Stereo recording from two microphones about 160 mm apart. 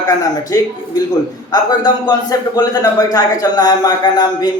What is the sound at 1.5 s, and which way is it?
A man's voice, 25° left (ahead or behind).